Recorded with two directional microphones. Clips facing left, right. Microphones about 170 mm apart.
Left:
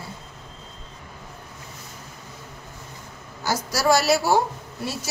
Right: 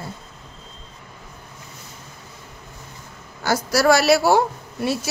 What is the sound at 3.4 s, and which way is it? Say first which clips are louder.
Speech: right 4 dB; 65° right (ahead or behind).